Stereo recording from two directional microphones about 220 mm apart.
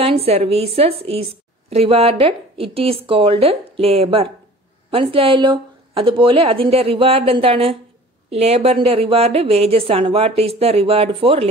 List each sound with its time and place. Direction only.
0.0 s a woman's voice: 25° right (ahead or behind)